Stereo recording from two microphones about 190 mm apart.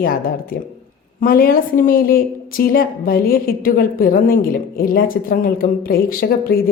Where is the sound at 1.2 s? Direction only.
50° left (ahead or behind).